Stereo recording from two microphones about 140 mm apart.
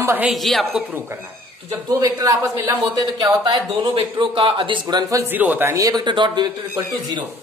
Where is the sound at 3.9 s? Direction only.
40° right (ahead or behind).